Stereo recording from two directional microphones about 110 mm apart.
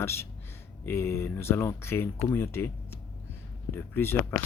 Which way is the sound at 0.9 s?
25° left (ahead or behind).